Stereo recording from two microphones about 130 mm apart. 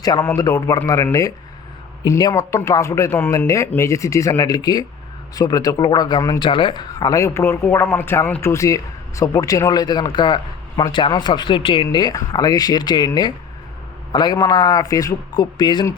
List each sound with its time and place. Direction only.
0.2 s speech: 20° left (ahead or behind)
2.0 s speech: 25° left (ahead or behind)